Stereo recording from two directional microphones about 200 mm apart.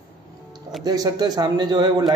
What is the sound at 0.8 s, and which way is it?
A man's voice, 20° right (ahead or behind).